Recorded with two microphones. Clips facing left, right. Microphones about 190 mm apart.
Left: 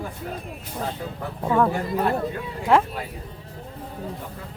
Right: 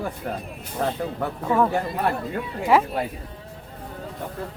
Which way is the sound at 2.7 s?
5° right (ahead or behind).